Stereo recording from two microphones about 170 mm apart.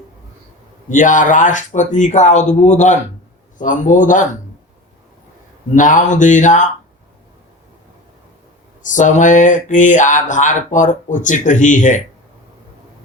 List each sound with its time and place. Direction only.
0.9 s speech: 50° left (ahead or behind)
5.7 s speech: 50° left (ahead or behind)
8.8 s speech: 45° left (ahead or behind)